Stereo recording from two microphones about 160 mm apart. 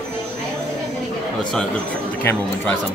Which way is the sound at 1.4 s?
5° left (ahead or behind).